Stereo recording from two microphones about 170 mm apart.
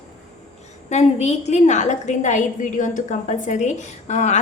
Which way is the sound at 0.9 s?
40° left (ahead or behind).